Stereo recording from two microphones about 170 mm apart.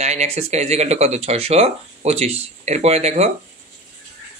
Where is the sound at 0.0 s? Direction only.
40° right (ahead or behind).